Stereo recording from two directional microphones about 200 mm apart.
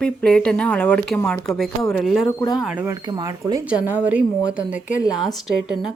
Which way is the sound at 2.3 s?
20° left (ahead or behind).